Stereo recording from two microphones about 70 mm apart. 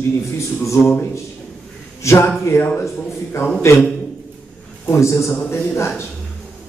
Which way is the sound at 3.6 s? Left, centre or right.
Left.